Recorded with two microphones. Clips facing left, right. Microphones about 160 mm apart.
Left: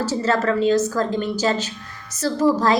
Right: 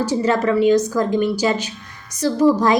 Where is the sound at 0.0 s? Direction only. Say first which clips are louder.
Right 3 dB; 15° right (ahead or behind).